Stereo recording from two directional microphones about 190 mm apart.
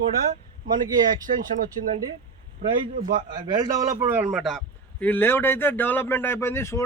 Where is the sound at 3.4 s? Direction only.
25° right (ahead or behind).